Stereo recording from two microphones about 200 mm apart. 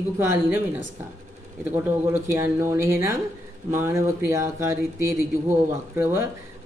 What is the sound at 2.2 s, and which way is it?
Speech, 15° right (ahead or behind).